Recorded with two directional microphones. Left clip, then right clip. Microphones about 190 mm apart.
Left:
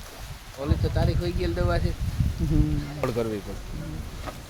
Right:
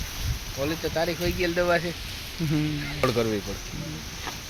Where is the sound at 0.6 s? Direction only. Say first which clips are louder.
Right 3 dB; 35° right (ahead or behind).